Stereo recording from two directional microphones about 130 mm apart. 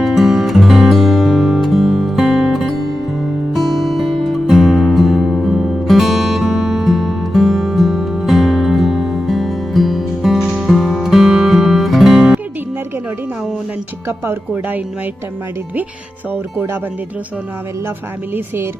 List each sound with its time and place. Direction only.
0.0 s music: centre (ahead or behind)
14.1 s speech: 15° right (ahead or behind)
18.3 s speech: 15° right (ahead or behind)